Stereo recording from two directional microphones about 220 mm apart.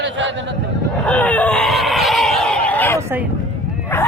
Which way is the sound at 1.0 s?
5° left (ahead or behind).